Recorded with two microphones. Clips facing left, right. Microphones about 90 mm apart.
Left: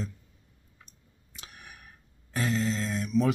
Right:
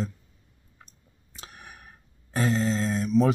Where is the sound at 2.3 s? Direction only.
35° right (ahead or behind).